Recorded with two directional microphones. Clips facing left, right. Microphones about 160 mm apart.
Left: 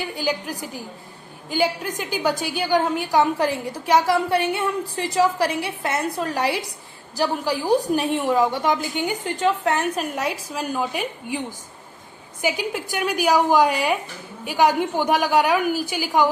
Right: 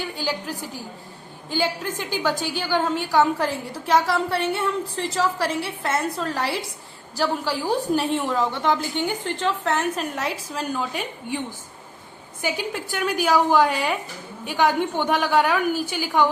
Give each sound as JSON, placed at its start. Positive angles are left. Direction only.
{"t": 0.2, "sound": "a woman's voice", "side_deg": 15}
{"t": 7.9, "sound": "a woman's voice", "side_deg": 15}
{"t": 12.4, "sound": "a woman's voice", "side_deg": 15}